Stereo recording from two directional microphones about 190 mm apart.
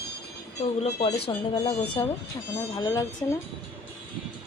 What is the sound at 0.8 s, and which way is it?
A woman's voice, 35° left (ahead or behind).